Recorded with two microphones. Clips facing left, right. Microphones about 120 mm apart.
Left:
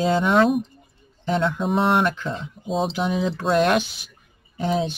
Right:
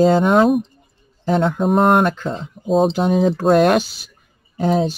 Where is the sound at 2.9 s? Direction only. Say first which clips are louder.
Right 7 dB; 45° right (ahead or behind).